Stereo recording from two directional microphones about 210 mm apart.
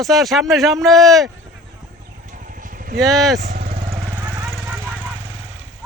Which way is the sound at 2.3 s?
40° right (ahead or behind).